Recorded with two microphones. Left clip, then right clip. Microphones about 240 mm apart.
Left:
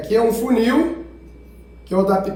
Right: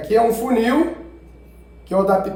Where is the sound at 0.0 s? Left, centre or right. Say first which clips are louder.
Right 1 dB; right.